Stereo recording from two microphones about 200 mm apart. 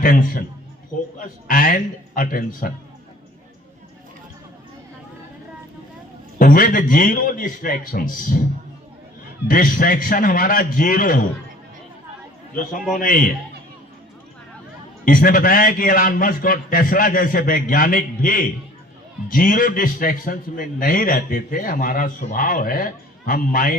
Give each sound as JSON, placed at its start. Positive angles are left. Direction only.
{"t": 0.0, "sound": "a man's voice", "side_deg": 45}
{"t": 6.4, "sound": "a man's voice", "side_deg": 45}
{"t": 9.5, "sound": "a man's voice", "side_deg": 45}
{"t": 13.0, "sound": "a man's voice", "side_deg": 45}
{"t": 15.0, "sound": "a man's voice", "side_deg": 45}